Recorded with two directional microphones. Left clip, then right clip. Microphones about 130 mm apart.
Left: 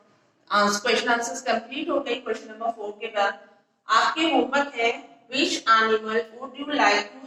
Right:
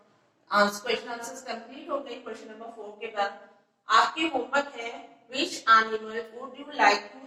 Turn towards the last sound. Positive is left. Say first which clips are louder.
# left 2 dB
turn(degrees=25)  # may be behind; listen again after turning